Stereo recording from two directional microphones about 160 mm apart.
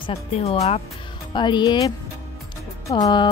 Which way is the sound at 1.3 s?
30° left (ahead or behind).